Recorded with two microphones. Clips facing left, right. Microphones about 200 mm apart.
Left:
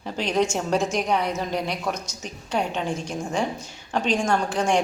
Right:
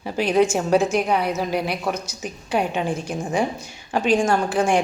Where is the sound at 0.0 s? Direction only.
10° right (ahead or behind).